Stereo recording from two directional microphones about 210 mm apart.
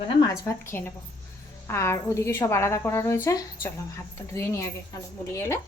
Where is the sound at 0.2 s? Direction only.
10° left (ahead or behind).